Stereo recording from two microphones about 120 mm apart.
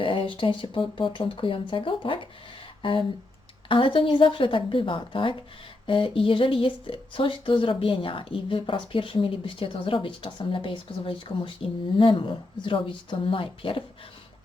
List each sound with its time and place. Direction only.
0.0 s speech: 45° left (ahead or behind)